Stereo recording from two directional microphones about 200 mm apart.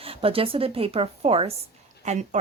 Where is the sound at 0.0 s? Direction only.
30° right (ahead or behind).